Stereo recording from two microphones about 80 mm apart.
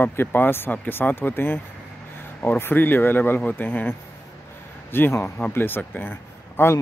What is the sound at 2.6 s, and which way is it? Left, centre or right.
Speech, left.